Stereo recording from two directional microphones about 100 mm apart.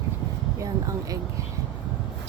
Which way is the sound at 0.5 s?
35° right (ahead or behind).